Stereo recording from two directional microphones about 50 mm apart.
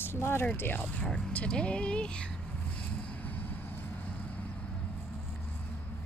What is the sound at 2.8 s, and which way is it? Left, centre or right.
Vehicle, left.